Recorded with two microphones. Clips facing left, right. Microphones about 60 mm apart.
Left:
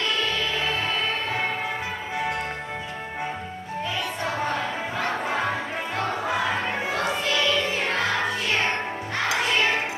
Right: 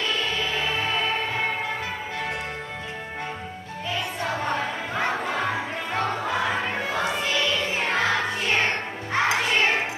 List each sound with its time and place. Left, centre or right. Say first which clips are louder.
0.4 s music: even; centre
4.5 s music: even; centre
5.2 s battle cry: left 1 dB; centre
6.5 s crowd: even; centre
7.2 s music: left 1 dB; centre
9.1 s music: right 2 dB; right